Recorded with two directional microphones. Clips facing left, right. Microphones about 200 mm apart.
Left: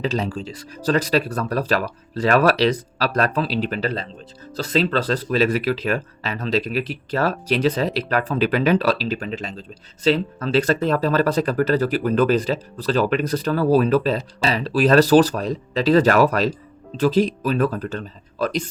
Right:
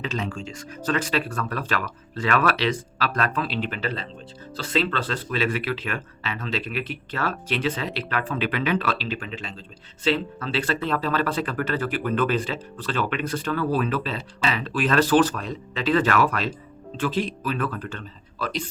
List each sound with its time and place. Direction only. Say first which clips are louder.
0.0 s speech: left 6 dB; 35° left (ahead or behind)